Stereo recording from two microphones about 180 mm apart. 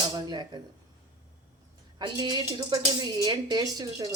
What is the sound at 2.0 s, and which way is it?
Speech, 25° right (ahead or behind).